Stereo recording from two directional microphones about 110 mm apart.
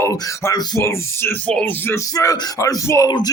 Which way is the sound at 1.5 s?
15° left (ahead or behind).